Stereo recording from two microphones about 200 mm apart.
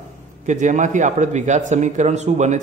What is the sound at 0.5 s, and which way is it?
A man's voice, 35° right (ahead or behind).